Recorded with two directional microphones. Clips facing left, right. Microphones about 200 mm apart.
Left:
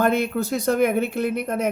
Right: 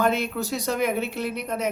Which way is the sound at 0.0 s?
55° left (ahead or behind).